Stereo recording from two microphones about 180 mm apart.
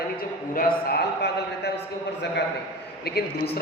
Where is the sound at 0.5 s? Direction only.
65° left (ahead or behind).